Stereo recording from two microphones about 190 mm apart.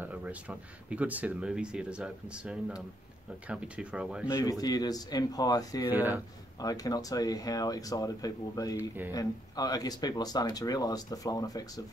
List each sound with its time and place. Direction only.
0.0 s speech: 10° right (ahead or behind)
4.3 s speech: 20° left (ahead or behind)
5.9 s speech: 10° right (ahead or behind)
6.6 s speech: 20° left (ahead or behind)